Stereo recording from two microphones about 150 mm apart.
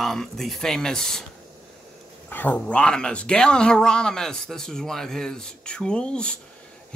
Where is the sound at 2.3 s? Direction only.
10° left (ahead or behind).